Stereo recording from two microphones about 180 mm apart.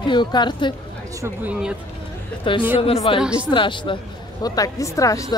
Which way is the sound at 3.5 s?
25° left (ahead or behind).